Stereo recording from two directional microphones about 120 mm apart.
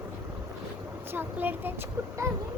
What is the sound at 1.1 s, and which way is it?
Speech, 15° right (ahead or behind).